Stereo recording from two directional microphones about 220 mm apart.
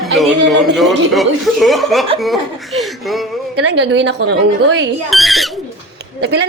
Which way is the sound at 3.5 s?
50° right (ahead or behind).